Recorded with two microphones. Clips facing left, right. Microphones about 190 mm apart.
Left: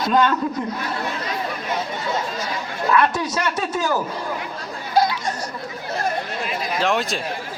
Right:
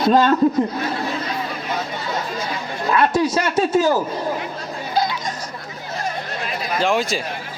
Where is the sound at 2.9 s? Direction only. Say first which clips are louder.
Right 3 dB; 30° right (ahead or behind).